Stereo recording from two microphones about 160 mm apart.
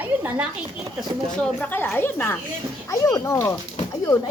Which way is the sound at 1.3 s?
5° left (ahead or behind).